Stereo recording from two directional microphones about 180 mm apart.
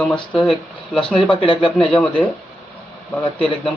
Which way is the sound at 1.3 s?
30° left (ahead or behind).